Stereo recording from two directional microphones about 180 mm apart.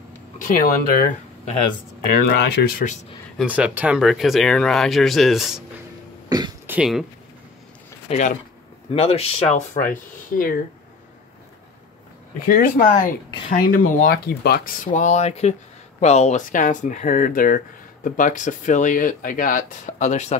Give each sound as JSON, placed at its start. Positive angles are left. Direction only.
{"t": 0.4, "sound": "speech", "side_deg": 50}
{"t": 2.0, "sound": "speech", "side_deg": 60}
{"t": 2.8, "sound": "speech", "side_deg": 40}
{"t": 3.3, "sound": "speech", "side_deg": -5}
{"t": 6.2, "sound": "throat clearing", "side_deg": -20}
{"t": 6.7, "sound": "speech", "side_deg": -5}
{"t": 8.1, "sound": "speech", "side_deg": 40}
{"t": 9.8, "sound": "speech", "side_deg": 50}
{"t": 12.4, "sound": "speech", "side_deg": 50}